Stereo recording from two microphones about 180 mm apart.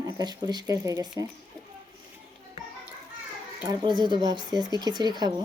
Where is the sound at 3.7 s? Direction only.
25° right (ahead or behind).